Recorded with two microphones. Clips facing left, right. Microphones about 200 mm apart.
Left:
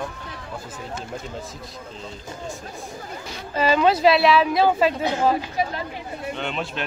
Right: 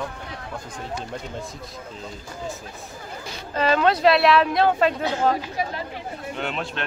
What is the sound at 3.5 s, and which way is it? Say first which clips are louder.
Speech: left 1 dB; 5° left (ahead or behind).